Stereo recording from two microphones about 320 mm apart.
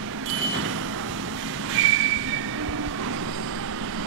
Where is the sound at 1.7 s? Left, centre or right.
Right.